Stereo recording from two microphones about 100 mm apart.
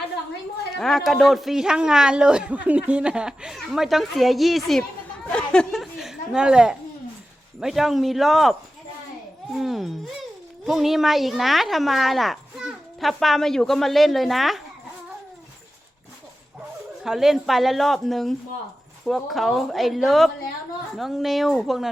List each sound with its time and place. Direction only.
0.8 s a man's voice: 5° left (ahead or behind)
5.3 s speech: 10° left (ahead or behind)
5.8 s a sound: 5° right (ahead or behind)
7.6 s a man's voice: centre (ahead or behind)
9.6 s a man's voice: 5° right (ahead or behind)
17.0 s a man's voice: 5° right (ahead or behind)